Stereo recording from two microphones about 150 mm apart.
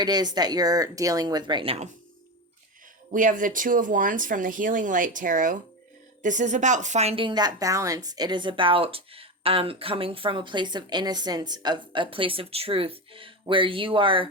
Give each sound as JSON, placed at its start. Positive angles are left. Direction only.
{"t": 0.0, "sound": "speech", "side_deg": -25}
{"t": 3.1, "sound": "a woman's voice", "side_deg": -60}